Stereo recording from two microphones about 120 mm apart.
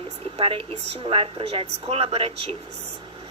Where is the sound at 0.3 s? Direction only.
55° right (ahead or behind).